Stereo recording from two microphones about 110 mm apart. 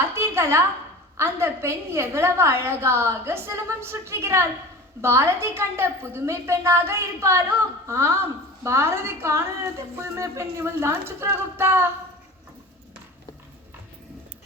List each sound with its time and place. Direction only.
0.0 s a woman's voice: 25° right (ahead or behind)